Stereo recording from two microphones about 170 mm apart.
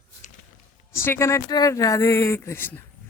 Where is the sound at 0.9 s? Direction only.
15° left (ahead or behind).